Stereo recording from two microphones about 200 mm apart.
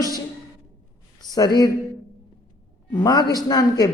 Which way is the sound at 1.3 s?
20° left (ahead or behind).